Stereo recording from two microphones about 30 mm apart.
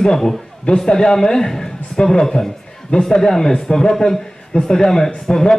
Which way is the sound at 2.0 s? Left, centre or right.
Left.